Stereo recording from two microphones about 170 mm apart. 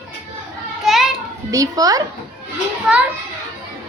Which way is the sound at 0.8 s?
Centre (ahead or behind).